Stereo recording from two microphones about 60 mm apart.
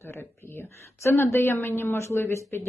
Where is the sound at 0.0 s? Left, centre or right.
Left.